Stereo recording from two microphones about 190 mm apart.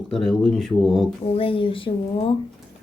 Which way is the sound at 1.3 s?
30° left (ahead or behind).